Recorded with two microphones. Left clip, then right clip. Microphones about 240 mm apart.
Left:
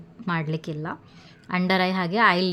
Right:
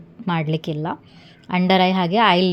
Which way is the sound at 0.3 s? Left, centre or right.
Centre.